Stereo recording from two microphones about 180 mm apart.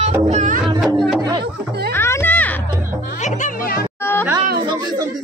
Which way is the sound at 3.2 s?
45° left (ahead or behind).